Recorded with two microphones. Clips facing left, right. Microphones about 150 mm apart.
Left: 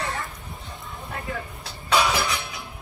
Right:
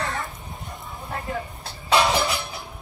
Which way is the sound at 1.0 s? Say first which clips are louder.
Right 3 dB; 35° right (ahead or behind).